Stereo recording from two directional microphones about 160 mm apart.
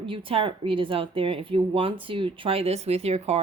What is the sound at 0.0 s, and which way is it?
Speech, 35° right (ahead or behind).